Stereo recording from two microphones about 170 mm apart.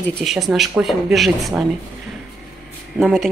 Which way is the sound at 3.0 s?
5° left (ahead or behind).